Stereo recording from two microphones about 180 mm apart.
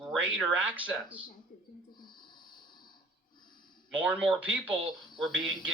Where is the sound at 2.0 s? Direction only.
25° left (ahead or behind).